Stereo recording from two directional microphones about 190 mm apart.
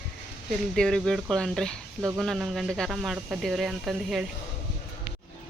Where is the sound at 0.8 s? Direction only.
5° left (ahead or behind).